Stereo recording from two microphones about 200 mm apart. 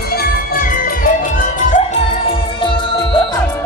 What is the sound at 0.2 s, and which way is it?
Music, 45° left (ahead or behind).